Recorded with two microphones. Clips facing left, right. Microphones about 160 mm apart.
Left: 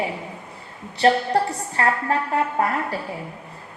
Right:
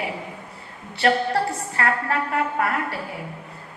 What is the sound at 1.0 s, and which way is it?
A woman's voice, 30° left (ahead or behind).